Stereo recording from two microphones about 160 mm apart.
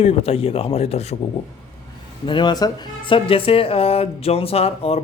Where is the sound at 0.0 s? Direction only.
40° left (ahead or behind).